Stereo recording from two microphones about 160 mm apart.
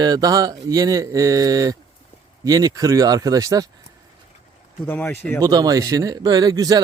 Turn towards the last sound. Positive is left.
turn(degrees=-25)  # may be behind; listen again after turning